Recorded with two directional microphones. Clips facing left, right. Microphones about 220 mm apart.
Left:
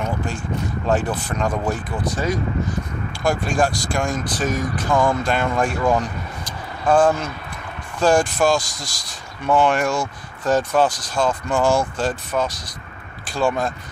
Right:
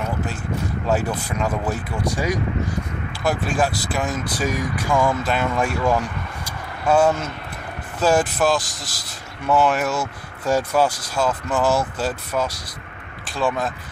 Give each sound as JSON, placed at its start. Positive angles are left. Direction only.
{"t": 0.8, "sound": "speech", "side_deg": -10}